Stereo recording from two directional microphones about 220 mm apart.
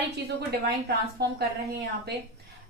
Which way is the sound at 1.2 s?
50° right (ahead or behind).